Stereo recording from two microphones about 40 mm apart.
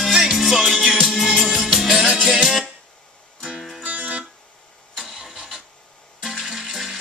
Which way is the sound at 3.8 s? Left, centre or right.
Right.